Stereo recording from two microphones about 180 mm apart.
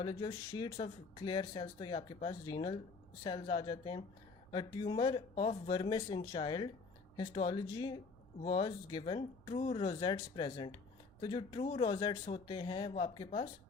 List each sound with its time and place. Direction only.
0.0 s speech: 25° left (ahead or behind)